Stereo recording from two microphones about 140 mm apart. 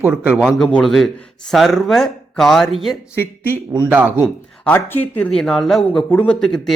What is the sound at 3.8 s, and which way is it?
Speech, 10° right (ahead or behind).